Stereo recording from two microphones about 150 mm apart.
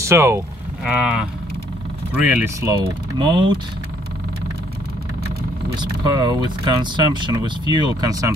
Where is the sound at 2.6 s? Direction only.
30° right (ahead or behind).